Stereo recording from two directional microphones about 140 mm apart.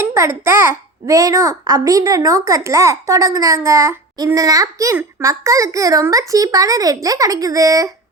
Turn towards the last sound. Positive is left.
turn(degrees=-25)  # may be behind; listen again after turning